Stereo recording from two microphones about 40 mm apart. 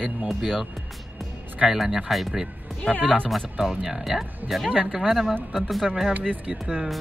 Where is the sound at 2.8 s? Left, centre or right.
Left.